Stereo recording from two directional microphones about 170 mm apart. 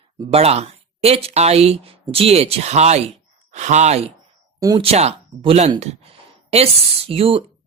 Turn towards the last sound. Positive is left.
turn(degrees=-35)  # may be behind; listen again after turning